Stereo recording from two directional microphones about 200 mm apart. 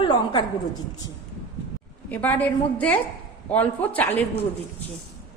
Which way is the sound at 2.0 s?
10° left (ahead or behind).